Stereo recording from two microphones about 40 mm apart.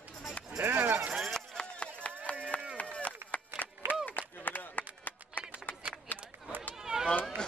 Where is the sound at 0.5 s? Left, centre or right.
Right.